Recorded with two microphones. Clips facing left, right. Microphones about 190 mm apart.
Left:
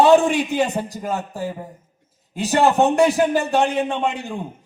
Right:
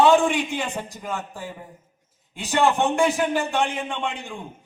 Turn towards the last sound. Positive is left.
turn(degrees=40)  # may be behind; listen again after turning